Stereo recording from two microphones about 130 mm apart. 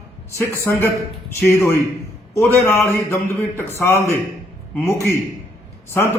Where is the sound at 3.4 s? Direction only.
20° left (ahead or behind).